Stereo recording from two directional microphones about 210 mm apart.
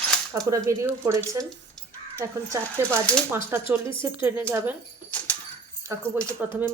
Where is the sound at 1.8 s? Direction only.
5° left (ahead or behind).